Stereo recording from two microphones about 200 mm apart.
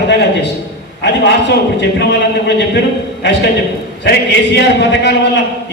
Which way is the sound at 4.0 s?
55° left (ahead or behind).